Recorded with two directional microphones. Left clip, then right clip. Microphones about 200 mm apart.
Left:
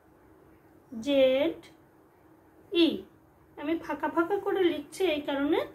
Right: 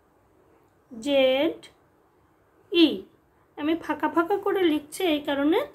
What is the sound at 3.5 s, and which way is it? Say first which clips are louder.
A woman's voice: right 5 dB; 50° right (ahead or behind).